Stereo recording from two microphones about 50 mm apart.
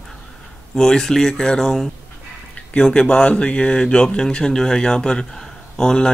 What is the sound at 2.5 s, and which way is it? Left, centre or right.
Speech, left.